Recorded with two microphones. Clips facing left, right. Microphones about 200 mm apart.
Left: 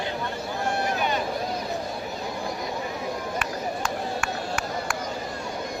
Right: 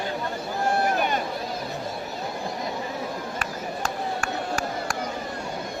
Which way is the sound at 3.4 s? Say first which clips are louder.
Left 1 dB; 45° right (ahead or behind).